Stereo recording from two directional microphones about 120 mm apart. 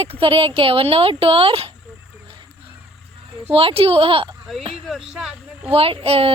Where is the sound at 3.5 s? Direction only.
50° right (ahead or behind).